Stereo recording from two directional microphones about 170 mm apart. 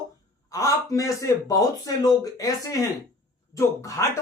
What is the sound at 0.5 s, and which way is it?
Speech, 20° left (ahead or behind).